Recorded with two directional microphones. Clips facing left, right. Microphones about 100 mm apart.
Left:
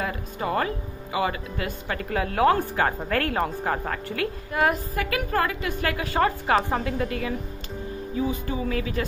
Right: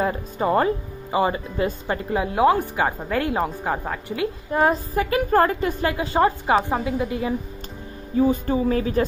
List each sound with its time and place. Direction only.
0.0 s a woman's voice: 30° right (ahead or behind)
4.5 s a woman's voice: 30° right (ahead or behind)
5.9 s a woman's voice: 20° right (ahead or behind)
8.2 s a woman's voice: 40° right (ahead or behind)